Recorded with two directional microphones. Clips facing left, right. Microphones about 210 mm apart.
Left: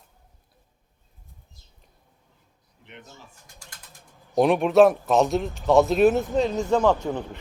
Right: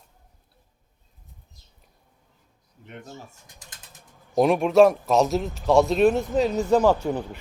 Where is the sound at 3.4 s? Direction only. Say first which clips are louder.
Even; 20° right (ahead or behind).